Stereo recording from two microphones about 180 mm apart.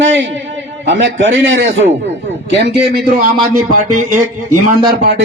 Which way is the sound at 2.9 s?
55° right (ahead or behind).